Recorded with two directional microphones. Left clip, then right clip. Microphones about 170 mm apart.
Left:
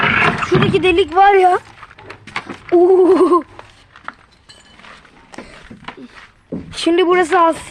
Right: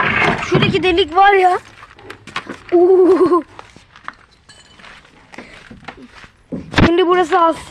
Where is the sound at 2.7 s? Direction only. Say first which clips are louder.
Even; 40° left (ahead or behind).